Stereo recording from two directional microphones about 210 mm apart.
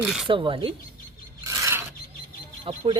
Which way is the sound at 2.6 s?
25° right (ahead or behind).